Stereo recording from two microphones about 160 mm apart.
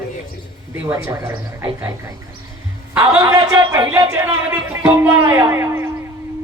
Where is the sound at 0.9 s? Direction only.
15° right (ahead or behind).